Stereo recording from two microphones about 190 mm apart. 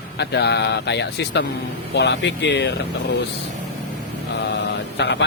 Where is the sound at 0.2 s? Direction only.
60° left (ahead or behind).